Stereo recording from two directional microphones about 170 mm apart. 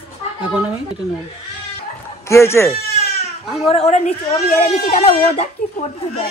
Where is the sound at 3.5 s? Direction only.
40° left (ahead or behind).